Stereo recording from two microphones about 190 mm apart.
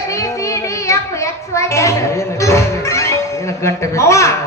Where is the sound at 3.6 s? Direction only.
15° left (ahead or behind).